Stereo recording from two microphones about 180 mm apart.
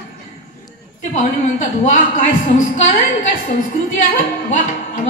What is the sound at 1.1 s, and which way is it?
A woman's voice, 45° left (ahead or behind).